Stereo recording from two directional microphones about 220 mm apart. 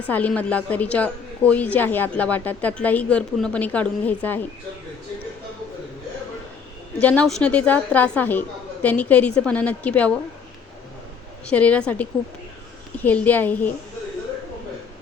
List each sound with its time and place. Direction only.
0.1 s a woman's voice: 5° left (ahead or behind)
7.0 s a woman's voice: 5° left (ahead or behind)
11.4 s a woman's voice: 5° left (ahead or behind)